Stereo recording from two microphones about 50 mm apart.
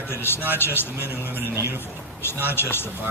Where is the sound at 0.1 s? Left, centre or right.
Left.